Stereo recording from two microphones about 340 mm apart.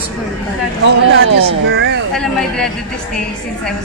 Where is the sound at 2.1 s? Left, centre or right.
Centre.